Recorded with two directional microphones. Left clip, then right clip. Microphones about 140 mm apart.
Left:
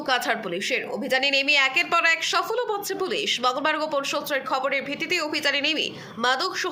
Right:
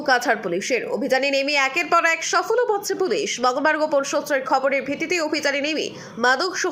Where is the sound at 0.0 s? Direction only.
30° right (ahead or behind).